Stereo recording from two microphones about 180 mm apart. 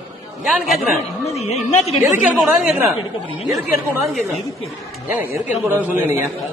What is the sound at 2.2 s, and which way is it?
Speech, 5° right (ahead or behind).